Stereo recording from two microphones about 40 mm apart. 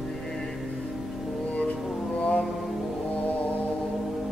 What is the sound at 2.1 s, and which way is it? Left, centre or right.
Music, left.